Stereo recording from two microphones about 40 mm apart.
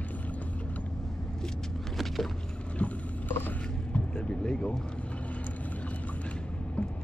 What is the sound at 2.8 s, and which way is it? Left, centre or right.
Vehicle, left.